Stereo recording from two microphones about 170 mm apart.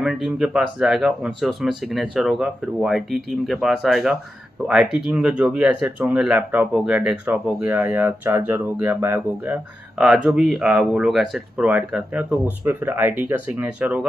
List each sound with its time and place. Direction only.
0.0 s speech: 5° right (ahead or behind)